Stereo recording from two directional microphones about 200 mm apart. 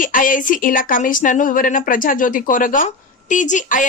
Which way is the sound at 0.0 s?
40° left (ahead or behind).